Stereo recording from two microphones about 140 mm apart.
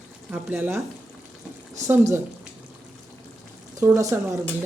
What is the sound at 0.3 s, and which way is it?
A man's voice, 10° right (ahead or behind).